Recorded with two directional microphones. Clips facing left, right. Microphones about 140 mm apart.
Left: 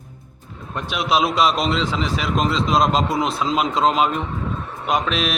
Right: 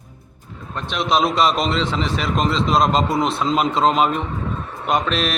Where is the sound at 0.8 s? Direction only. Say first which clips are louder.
Right 1 dB; 5° left (ahead or behind).